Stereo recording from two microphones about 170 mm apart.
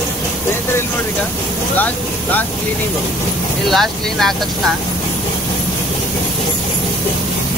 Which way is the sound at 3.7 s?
Centre (ahead or behind).